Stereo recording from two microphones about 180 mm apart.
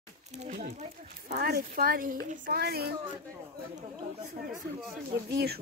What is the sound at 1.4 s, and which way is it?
Speech, 55° right (ahead or behind).